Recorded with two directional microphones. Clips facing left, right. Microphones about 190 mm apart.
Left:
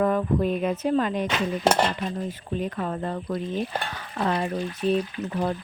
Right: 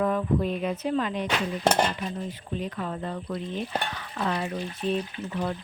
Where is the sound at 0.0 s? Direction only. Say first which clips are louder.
Left 2 dB; 50° left (ahead or behind).